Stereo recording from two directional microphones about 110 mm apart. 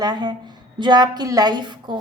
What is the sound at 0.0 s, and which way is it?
A woman's voice, 40° right (ahead or behind).